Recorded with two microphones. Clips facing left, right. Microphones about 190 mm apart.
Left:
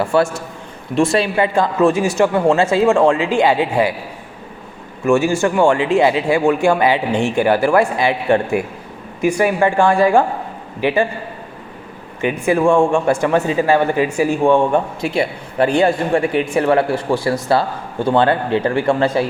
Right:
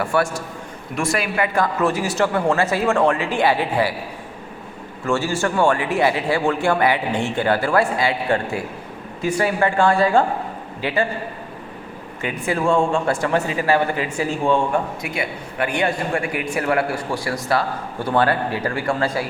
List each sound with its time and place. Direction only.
0.0 s a man's voice: 25° left (ahead or behind)
5.1 s a man's voice: 20° left (ahead or behind)
12.2 s speech: 15° left (ahead or behind)
15.0 s a man's voice: 30° left (ahead or behind)